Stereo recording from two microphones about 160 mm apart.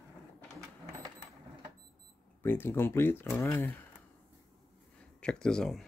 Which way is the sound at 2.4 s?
15° left (ahead or behind).